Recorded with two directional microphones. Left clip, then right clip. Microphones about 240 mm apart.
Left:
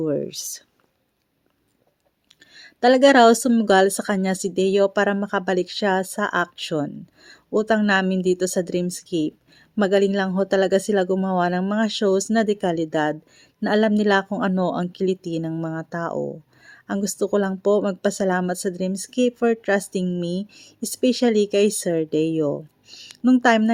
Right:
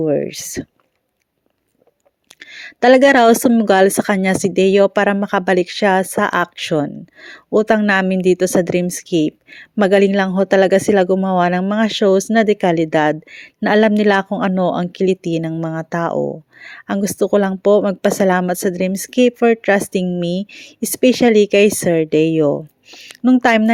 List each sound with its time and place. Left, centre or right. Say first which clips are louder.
0.0 s speech: right 7 dB; right
2.4 s speech: right 5 dB; right